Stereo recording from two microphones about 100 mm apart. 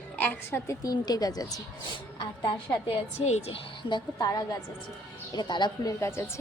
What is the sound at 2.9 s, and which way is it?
Speech, 85° left.